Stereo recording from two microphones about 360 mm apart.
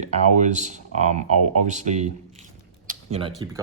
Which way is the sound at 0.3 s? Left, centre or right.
Centre.